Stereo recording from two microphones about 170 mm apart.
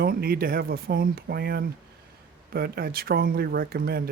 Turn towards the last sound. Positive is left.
turn(degrees=-60)  # may be behind; listen again after turning